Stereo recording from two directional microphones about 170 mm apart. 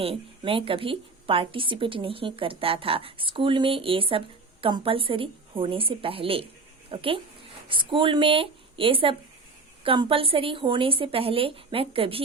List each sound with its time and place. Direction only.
0.0 s a woman's voice: 35° right (ahead or behind)